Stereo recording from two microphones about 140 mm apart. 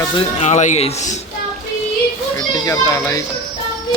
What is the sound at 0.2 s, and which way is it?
Speech, 50° left (ahead or behind).